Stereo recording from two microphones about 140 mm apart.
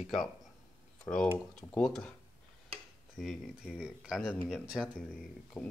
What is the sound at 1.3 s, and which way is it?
Speech, 15° left (ahead or behind).